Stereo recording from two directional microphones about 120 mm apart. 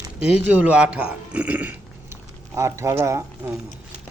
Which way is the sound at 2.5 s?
25° right (ahead or behind).